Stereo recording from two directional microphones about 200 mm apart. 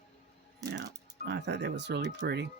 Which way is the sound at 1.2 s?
55° right (ahead or behind).